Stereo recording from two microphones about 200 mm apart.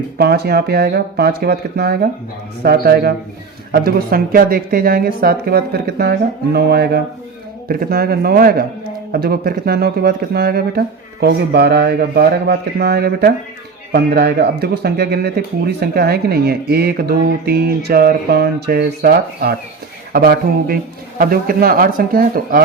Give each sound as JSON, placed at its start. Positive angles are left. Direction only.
{"t": 0.2, "sound": "speech", "side_deg": -55}